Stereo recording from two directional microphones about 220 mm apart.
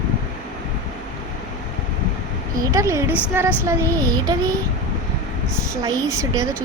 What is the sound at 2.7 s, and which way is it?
Child singing, 15° right (ahead or behind).